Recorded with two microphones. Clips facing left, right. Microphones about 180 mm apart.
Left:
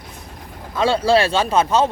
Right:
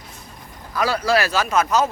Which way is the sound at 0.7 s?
25° left (ahead or behind).